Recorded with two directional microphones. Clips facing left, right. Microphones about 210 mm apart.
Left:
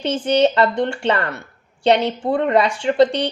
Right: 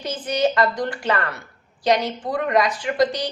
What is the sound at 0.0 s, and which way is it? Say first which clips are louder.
A woman's voice: left 6 dB; 30° left (ahead or behind).